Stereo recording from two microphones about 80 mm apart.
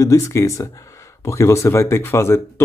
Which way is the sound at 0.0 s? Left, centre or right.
Left.